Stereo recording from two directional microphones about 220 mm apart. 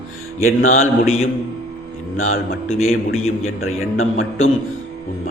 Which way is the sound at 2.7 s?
70° left (ahead or behind).